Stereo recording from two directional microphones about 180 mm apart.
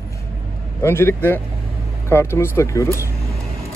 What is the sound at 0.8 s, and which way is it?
A man's voice, 15° left (ahead or behind).